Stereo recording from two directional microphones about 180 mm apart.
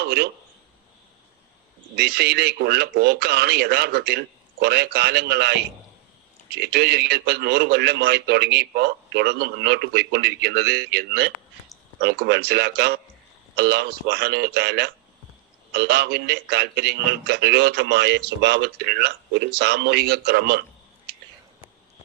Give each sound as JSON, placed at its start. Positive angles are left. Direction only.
{"t": 0.0, "sound": "a man's voice", "side_deg": -65}
{"t": 2.0, "sound": "a man's voice", "side_deg": -65}